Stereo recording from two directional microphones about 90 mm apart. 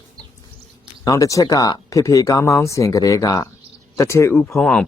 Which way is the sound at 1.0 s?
40° left (ahead or behind).